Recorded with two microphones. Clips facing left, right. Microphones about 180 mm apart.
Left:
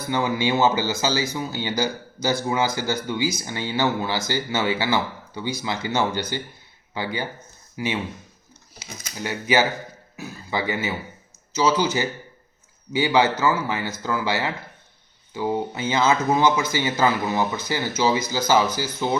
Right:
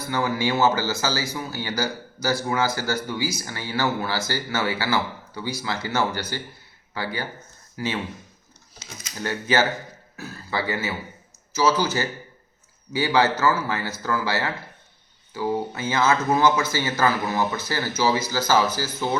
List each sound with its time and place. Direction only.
0.1 s a man's voice: 20° left (ahead or behind)
9.1 s speech: 15° left (ahead or behind)